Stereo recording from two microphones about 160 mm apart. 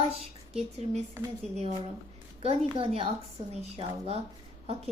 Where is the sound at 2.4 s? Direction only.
35° right (ahead or behind).